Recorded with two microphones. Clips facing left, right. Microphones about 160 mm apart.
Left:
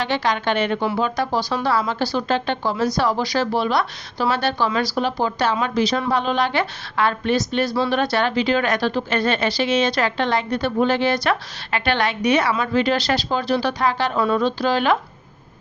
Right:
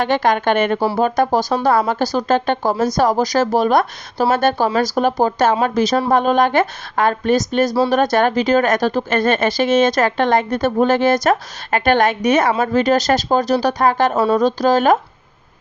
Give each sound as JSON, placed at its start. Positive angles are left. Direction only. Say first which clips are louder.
{"t": 0.0, "sound": "speech", "louder": "right 5 dB", "side_deg": -50}